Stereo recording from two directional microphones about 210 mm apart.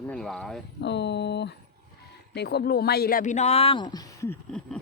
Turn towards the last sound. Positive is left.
turn(degrees=10)  # may be behind; listen again after turning